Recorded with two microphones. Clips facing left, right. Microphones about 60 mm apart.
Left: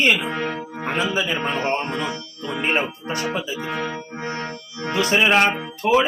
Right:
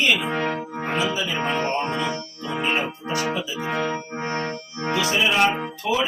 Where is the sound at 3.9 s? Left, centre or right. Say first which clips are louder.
Right 2 dB; right.